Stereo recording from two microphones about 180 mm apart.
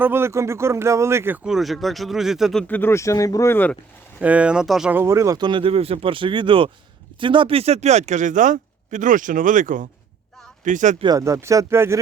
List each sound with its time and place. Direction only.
0.0 s a man's voice: 15° right (ahead or behind); by 3.8 s 10° left (ahead or behind)
4.2 s speech: 5° right (ahead or behind); by 10.9 s 45° right (ahead or behind)
11.0 s speech: 20° right (ahead or behind)